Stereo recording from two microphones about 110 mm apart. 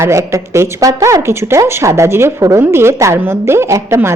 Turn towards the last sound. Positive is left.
turn(degrees=-25)  # may be behind; listen again after turning